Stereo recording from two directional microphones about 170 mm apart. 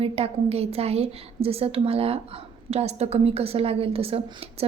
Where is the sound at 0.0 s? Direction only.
35° right (ahead or behind).